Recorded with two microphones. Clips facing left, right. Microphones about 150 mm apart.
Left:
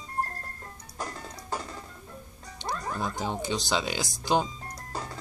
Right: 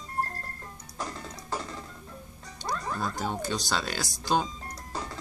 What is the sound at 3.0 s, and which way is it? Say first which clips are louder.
Speech: even; 20° left (ahead or behind).